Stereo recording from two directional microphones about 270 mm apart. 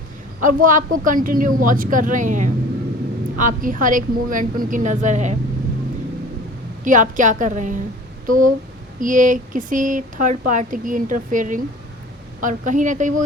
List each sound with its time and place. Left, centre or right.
0.3 s speech: right
6.8 s speech: right